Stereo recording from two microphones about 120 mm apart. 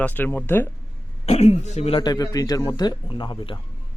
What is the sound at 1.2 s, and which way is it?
Speech, 60° left (ahead or behind).